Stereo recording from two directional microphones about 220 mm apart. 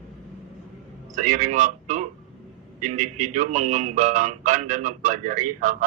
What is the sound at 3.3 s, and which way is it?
Speech, 35° right (ahead or behind).